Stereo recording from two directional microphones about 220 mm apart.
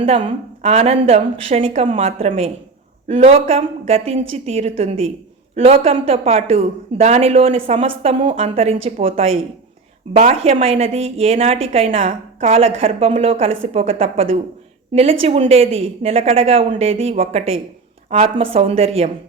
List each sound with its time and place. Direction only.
0.0 s a woman's voice: 25° right (ahead or behind)